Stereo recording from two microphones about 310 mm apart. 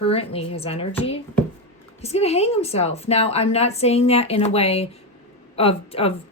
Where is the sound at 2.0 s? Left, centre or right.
Centre.